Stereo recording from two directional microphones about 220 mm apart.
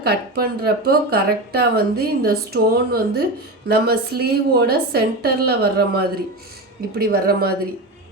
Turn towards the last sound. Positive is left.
turn(degrees=-45)  # may be behind; listen again after turning